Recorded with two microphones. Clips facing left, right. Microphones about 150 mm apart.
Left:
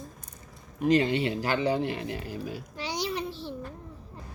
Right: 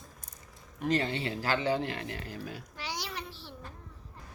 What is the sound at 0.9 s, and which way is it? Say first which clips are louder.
Speech: left 7 dB; 15° left (ahead or behind).